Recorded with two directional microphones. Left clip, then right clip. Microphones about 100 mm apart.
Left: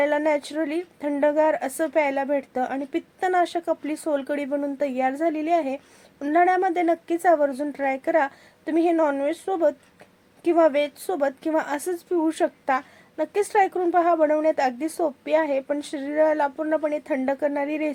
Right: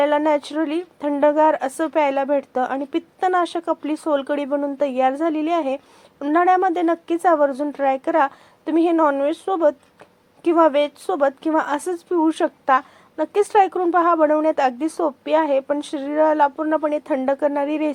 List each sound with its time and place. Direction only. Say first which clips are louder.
0.0 s a woman's voice: right 4 dB; 20° right (ahead or behind)